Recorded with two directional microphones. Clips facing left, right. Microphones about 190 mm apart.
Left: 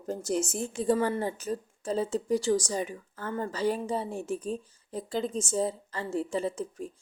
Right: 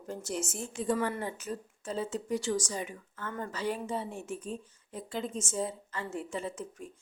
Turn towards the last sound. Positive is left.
turn(degrees=35)  # may be behind; listen again after turning